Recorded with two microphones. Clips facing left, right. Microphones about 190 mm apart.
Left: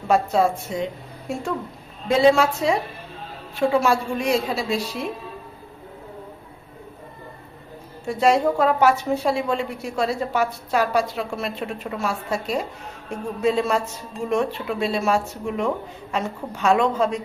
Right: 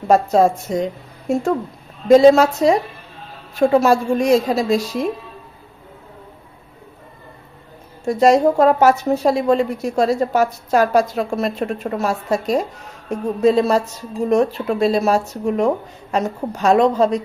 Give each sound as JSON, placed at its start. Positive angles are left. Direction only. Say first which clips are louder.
{"t": 0.1, "sound": "a woman's voice", "louder": "right 5 dB", "side_deg": -40}
{"t": 8.0, "sound": "a woman's voice", "louder": "right 5 dB", "side_deg": -40}